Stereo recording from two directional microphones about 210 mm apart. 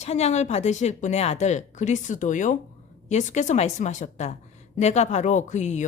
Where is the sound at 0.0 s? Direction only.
30° left (ahead or behind).